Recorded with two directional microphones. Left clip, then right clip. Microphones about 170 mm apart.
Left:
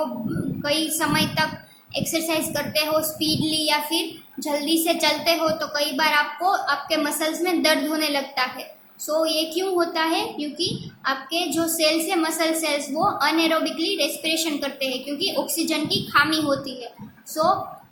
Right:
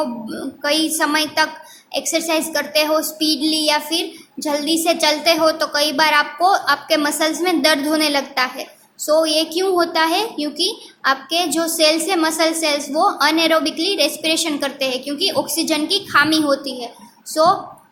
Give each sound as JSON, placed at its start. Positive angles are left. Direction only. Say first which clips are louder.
{"t": 0.6, "sound": "a woman's voice", "louder": "right 6 dB", "side_deg": -35}